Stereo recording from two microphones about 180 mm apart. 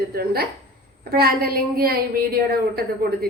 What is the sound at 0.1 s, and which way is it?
A woman's voice, 60° right (ahead or behind).